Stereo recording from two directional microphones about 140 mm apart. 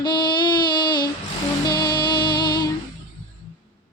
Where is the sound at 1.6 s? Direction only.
30° left (ahead or behind).